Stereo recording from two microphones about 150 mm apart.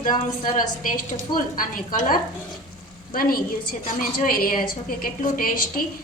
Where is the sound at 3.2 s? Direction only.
75° left (ahead or behind).